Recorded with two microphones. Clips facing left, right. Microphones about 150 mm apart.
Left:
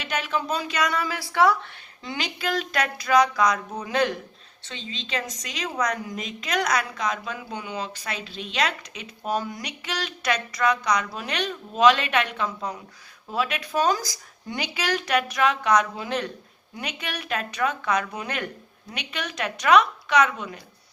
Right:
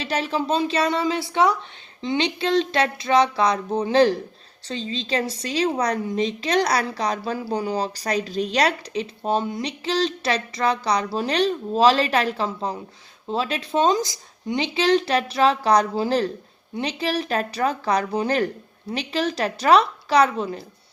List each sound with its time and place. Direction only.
0.0 s a woman's voice: 30° right (ahead or behind)